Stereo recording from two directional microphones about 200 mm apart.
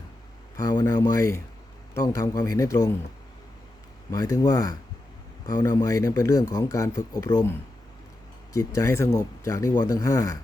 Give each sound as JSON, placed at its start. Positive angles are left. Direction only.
{"t": 0.5, "sound": "speech", "side_deg": 20}
{"t": 4.1, "sound": "speech", "side_deg": 15}
{"t": 8.5, "sound": "speech", "side_deg": 15}